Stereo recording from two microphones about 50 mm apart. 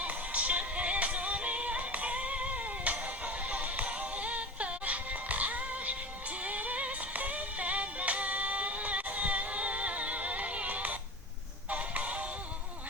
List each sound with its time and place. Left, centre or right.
0.0 s music: right